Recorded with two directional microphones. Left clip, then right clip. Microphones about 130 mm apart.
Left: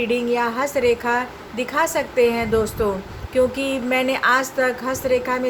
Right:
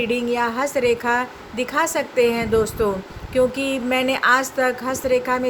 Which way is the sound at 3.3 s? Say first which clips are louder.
Even; 40° right (ahead or behind).